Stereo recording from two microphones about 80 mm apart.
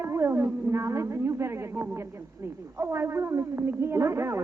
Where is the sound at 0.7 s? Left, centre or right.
Right.